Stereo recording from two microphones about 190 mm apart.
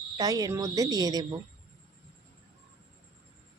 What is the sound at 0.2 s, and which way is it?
A woman's voice, 20° right (ahead or behind).